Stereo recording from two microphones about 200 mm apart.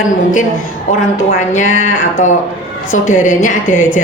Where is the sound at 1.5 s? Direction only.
35° left (ahead or behind).